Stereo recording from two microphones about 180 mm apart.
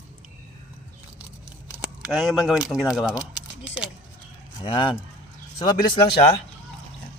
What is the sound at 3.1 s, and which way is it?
Speech, 20° left (ahead or behind).